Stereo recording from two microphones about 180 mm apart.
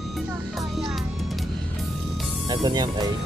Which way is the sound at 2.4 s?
25° right (ahead or behind).